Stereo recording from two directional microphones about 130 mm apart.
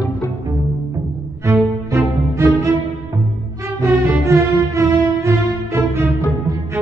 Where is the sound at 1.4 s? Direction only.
20° right (ahead or behind).